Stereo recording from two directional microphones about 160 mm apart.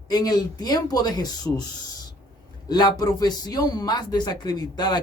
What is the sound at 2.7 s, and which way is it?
Speech, 25° left (ahead or behind).